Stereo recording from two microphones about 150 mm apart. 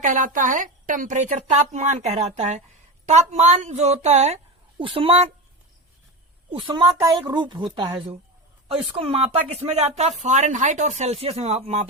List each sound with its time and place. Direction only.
0.0 s a woman's voice: 60° right (ahead or behind)
4.8 s a woman's voice: 35° right (ahead or behind)
6.5 s a woman's voice: 35° right (ahead or behind)
9.1 s speech: 45° right (ahead or behind)